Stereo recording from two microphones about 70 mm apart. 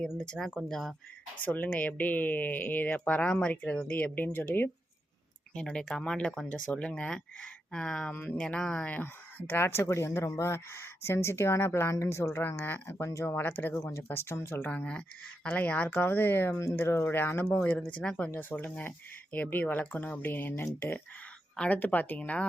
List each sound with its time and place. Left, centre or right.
0.2 s speech: centre
1.4 s speech: left
5.5 s speech: centre
9.5 s speech: left
9.8 s speech: left
12.4 s speech: left
13.0 s speech: left
13.2 s speech: left
14.7 s speech: centre
16.6 s speech: left; by 18.3 s centre
18.3 s speech: left